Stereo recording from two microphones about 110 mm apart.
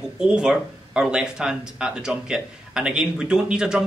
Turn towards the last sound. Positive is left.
turn(degrees=-5)  # may be behind; listen again after turning